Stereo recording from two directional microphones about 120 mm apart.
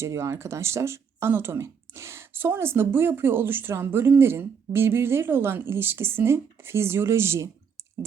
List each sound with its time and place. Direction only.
0.0 s speech: 25° right (ahead or behind)